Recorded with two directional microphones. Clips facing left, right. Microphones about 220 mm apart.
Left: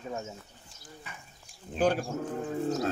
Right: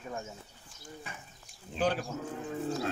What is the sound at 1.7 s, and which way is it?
Speech, 45° left (ahead or behind).